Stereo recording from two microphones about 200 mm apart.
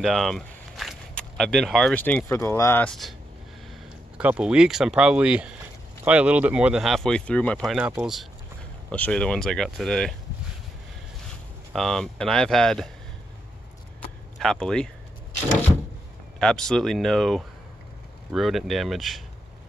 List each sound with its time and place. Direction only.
0.0 s speech: centre (ahead or behind)
4.2 s speech: 5° right (ahead or behind)
11.7 s speech: centre (ahead or behind)
14.4 s speech: 5° left (ahead or behind)
16.3 s speech: 5° left (ahead or behind)